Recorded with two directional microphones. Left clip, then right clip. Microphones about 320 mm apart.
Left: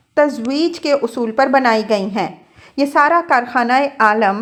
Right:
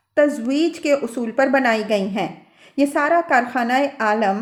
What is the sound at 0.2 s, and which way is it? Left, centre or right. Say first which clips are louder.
A woman's voice: left 2 dB; centre.